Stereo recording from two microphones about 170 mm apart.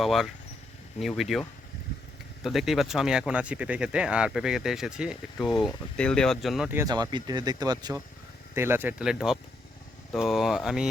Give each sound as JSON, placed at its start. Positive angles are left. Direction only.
{"t": 0.0, "sound": "speech", "side_deg": 0}
{"t": 6.7, "sound": "speech", "side_deg": -20}